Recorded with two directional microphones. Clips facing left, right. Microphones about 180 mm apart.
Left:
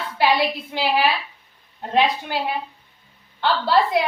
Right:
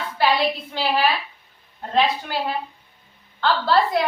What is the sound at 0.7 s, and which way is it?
A woman's voice, 15° left (ahead or behind).